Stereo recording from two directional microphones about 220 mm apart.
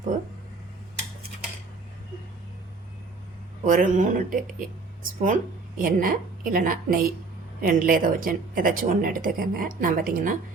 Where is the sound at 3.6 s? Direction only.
35° right (ahead or behind).